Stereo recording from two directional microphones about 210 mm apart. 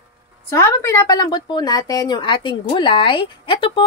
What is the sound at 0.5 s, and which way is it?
A woman's voice, 15° left (ahead or behind).